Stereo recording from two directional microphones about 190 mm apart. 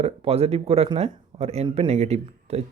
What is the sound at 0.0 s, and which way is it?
Speech, 30° right (ahead or behind).